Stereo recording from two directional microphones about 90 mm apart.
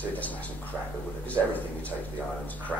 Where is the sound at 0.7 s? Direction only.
20° right (ahead or behind).